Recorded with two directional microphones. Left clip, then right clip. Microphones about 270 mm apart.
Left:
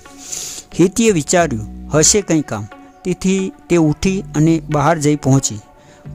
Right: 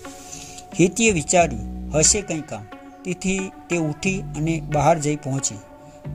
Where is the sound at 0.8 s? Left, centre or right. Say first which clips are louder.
Left 5 dB; left.